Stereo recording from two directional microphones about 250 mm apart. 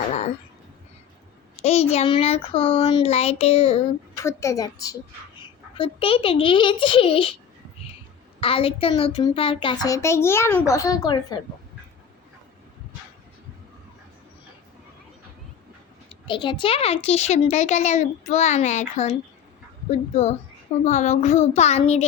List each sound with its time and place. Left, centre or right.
1.5 s speech: left
4.2 s a woman's voice: centre
8.4 s a woman's voice: left
16.2 s speech: centre